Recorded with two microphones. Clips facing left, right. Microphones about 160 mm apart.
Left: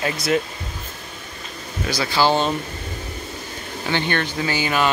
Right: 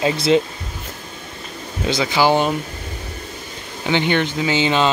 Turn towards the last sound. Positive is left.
turn(degrees=-25)  # may be behind; listen again after turning